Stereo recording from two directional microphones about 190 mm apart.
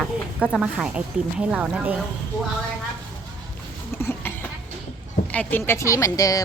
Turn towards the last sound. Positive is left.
turn(degrees=20)  # may be behind; listen again after turning